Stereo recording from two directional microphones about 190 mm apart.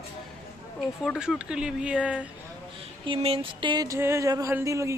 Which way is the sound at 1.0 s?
Centre (ahead or behind).